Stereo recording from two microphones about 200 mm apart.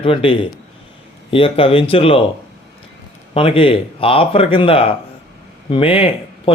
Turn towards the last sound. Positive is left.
turn(degrees=25)  # may be behind; listen again after turning